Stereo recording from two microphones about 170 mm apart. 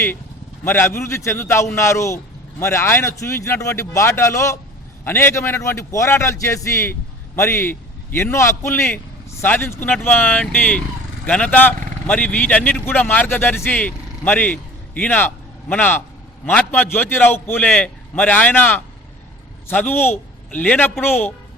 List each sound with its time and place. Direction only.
0.6 s a man's voice: 15° left (ahead or behind)